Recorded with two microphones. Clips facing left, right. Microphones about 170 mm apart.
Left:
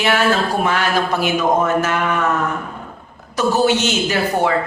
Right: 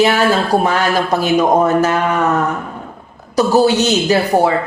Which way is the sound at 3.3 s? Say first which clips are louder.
Right 4 dB; 35° right (ahead or behind).